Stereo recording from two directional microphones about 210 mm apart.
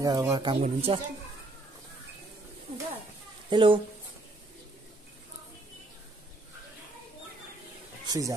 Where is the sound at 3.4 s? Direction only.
20° right (ahead or behind).